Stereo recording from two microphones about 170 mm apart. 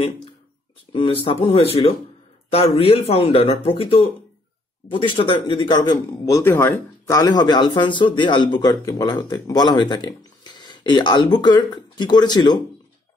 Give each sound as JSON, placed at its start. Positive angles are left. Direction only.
{"t": 0.9, "sound": "a man's voice", "side_deg": 30}